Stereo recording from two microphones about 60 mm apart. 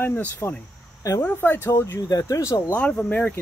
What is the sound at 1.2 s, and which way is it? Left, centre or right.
Speech, left.